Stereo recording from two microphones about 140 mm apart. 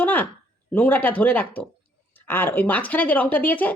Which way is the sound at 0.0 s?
10° left (ahead or behind).